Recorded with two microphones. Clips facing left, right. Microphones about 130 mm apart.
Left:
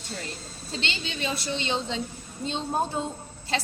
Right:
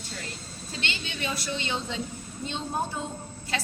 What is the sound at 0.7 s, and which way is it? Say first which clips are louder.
A woman's voice: left 2 dB; 25° left (ahead or behind).